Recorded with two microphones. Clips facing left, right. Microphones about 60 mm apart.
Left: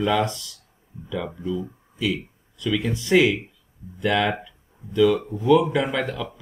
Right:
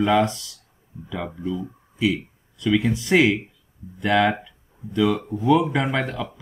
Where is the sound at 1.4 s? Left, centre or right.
Centre.